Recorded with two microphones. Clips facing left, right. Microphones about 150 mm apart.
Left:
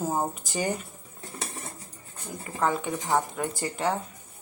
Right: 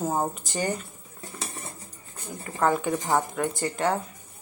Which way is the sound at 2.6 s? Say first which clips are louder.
Right 3 dB; 5° right (ahead or behind).